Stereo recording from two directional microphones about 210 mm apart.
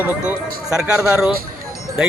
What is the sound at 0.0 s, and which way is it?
Speech, 10° right (ahead or behind).